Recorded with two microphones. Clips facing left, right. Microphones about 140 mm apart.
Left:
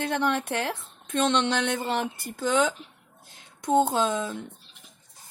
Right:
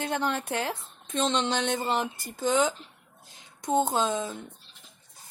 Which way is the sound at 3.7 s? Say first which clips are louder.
Left 3 dB; 55° left (ahead or behind).